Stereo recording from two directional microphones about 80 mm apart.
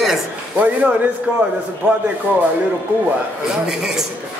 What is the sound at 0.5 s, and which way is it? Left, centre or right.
Speech, centre.